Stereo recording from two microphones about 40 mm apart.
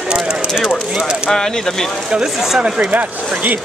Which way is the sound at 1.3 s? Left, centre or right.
Centre.